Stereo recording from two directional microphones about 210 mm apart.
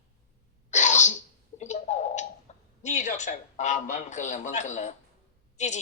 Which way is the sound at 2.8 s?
35° left (ahead or behind).